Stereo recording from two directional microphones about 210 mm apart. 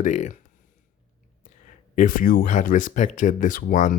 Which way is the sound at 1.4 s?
40° left (ahead or behind).